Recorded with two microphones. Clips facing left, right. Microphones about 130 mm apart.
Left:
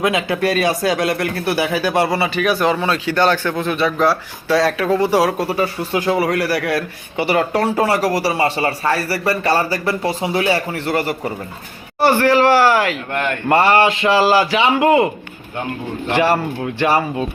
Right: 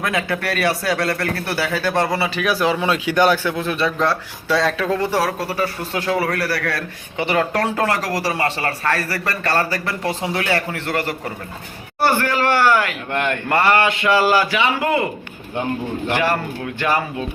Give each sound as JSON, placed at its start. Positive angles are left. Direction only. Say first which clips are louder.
{"t": 0.0, "sound": "speech", "louder": "left 5 dB", "side_deg": 20}
{"t": 2.0, "sound": "speech", "louder": "left 3 dB", "side_deg": 0}
{"t": 2.8, "sound": "speech", "louder": "even", "side_deg": -10}
{"t": 11.9, "sound": "a man's voice", "louder": "left 5 dB", "side_deg": 25}
{"t": 16.0, "sound": "a man's voice", "louder": "left 5 dB", "side_deg": 25}